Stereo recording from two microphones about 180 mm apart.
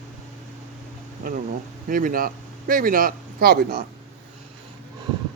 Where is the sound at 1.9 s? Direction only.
50° right (ahead or behind).